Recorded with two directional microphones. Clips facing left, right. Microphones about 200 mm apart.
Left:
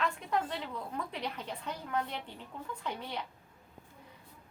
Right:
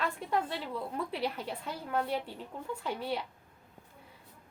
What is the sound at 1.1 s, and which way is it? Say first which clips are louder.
Speech: right 4 dB; 10° right (ahead or behind).